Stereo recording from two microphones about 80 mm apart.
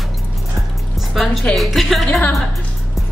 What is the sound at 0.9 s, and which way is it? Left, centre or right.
Music, centre.